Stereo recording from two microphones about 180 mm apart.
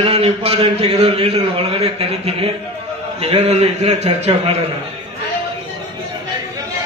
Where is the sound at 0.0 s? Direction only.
35° right (ahead or behind).